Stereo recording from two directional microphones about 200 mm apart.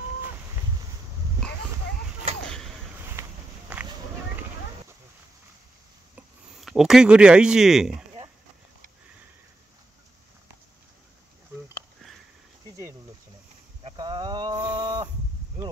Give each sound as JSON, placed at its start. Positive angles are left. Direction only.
{"t": 2.4, "sound": "whip", "side_deg": 0}
{"t": 3.1, "sound": "walk", "side_deg": -10}
{"t": 6.1, "sound": "speech", "side_deg": 0}
{"t": 13.8, "sound": "a sound", "side_deg": -20}